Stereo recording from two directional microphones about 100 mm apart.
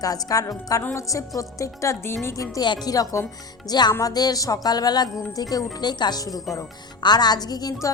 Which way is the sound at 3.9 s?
40° left (ahead or behind).